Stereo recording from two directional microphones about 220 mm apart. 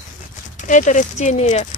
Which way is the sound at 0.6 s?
35° left (ahead or behind).